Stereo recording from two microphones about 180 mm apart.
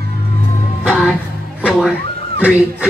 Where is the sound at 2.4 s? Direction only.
10° right (ahead or behind).